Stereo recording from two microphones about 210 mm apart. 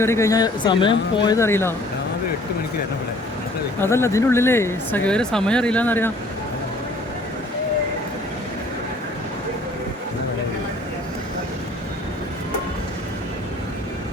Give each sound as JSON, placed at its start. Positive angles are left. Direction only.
{"t": 0.0, "sound": "speech", "side_deg": 15}
{"t": 3.8, "sound": "speech", "side_deg": 10}